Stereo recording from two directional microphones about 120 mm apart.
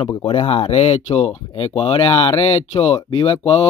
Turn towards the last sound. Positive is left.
turn(degrees=45)  # may be behind; listen again after turning